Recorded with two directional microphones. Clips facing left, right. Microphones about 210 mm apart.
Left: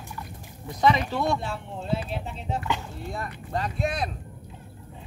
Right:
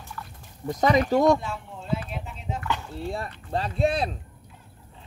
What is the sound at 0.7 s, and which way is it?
Speech, 45° right (ahead or behind).